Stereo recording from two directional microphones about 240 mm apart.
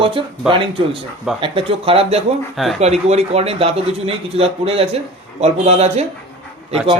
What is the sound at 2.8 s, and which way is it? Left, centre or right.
A man's voice, right.